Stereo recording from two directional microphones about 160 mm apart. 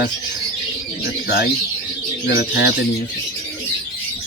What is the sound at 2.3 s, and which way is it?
Speech, 85° left.